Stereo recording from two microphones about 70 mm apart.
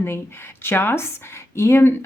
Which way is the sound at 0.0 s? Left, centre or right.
Left.